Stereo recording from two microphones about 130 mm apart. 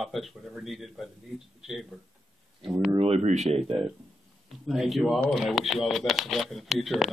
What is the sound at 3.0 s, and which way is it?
Speech, 55° right (ahead or behind).